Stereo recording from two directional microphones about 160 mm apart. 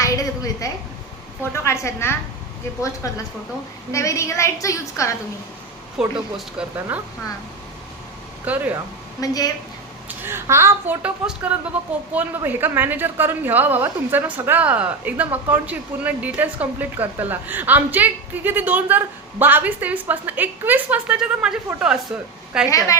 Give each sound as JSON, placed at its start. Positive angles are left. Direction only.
{"t": 0.0, "sound": "a sound", "side_deg": 20}
{"t": 1.5, "sound": "a woman's voice", "side_deg": 15}
{"t": 6.0, "sound": "speech", "side_deg": -5}
{"t": 8.4, "sound": "a woman's voice", "side_deg": -10}
{"t": 9.2, "sound": "a woman's voice", "side_deg": 25}
{"t": 10.1, "sound": "a woman's voice", "side_deg": -15}